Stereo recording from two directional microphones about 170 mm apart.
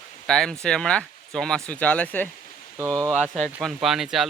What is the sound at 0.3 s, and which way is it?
Speech, 5° left (ahead or behind).